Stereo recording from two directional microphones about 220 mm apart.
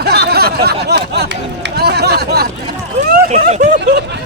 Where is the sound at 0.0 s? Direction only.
45° right (ahead or behind).